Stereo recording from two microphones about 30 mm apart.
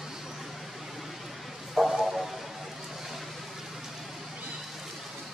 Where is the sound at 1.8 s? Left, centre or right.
Centre.